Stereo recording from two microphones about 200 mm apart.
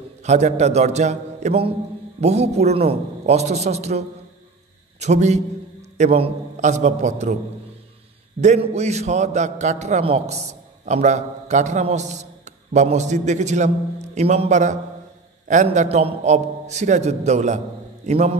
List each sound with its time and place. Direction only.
0.2 s a man's voice: 35° right (ahead or behind)
5.0 s a man's voice: 35° right (ahead or behind)
8.4 s a man's voice: 35° right (ahead or behind)